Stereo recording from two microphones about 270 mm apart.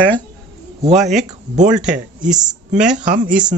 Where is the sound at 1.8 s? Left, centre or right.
Centre.